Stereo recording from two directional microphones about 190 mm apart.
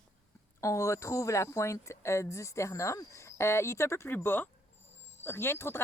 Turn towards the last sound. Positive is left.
turn(degrees=10)  # may be behind; listen again after turning